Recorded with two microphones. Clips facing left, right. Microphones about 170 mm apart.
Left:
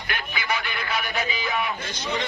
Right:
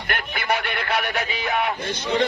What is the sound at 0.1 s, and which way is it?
Speech, 60° right (ahead or behind).